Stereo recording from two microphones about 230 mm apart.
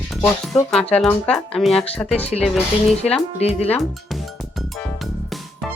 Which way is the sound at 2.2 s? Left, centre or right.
Left.